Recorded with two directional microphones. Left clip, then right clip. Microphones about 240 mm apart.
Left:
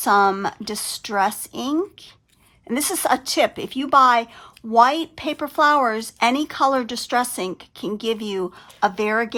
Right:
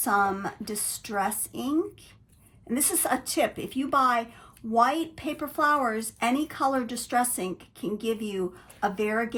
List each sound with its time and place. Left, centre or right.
0.0 s speech: centre